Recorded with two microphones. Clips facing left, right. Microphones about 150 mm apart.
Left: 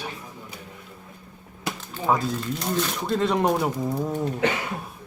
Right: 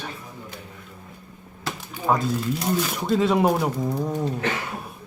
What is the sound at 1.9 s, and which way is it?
Speech, 5° right (ahead or behind).